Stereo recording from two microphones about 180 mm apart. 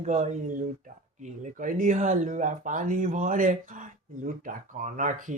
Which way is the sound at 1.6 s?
50° right (ahead or behind).